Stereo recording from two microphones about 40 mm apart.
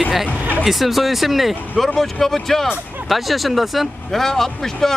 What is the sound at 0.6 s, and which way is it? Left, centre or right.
Speech, centre.